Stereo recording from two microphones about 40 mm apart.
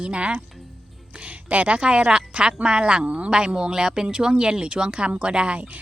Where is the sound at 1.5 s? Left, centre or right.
Right.